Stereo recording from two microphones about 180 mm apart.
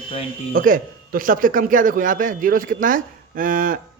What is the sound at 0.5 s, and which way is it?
A man's voice, 50° right (ahead or behind).